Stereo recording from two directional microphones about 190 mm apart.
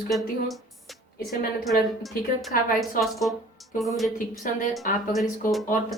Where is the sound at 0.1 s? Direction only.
Centre (ahead or behind).